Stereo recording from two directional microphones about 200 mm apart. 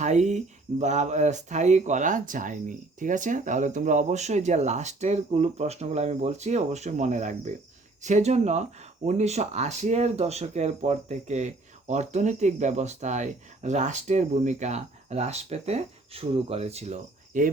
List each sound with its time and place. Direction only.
0.0 s speech: 35° right (ahead or behind)